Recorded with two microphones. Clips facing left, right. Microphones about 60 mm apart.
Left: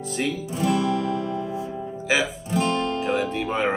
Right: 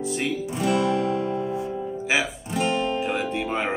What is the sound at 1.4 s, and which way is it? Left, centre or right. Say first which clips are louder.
Music: right 2 dB; right.